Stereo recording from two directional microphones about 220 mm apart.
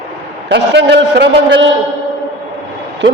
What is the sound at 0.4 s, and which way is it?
Speech, 50° right (ahead or behind).